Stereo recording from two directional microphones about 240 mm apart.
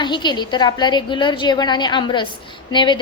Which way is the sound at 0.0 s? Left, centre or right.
Centre.